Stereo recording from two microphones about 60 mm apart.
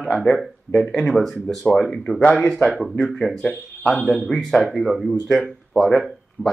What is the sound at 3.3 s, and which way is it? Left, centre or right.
Speech, centre.